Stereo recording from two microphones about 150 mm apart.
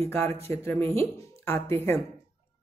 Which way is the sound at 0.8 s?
40° right (ahead or behind).